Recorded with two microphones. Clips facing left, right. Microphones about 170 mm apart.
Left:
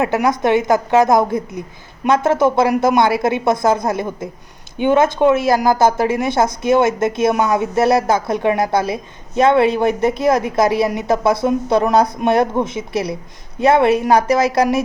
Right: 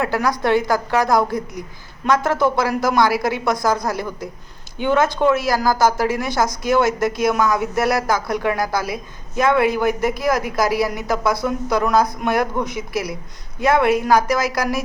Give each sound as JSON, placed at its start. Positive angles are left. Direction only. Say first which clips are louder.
{"t": 0.0, "sound": "a woman's voice", "louder": "left 4 dB", "side_deg": 20}